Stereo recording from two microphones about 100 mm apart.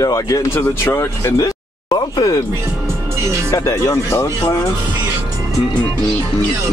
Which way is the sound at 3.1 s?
25° right (ahead or behind).